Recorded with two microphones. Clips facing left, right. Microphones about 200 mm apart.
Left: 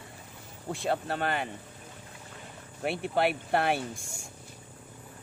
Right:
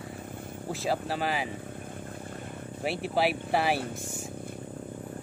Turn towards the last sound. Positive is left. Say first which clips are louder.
# even
turn(degrees=-5)  # may be behind; listen again after turning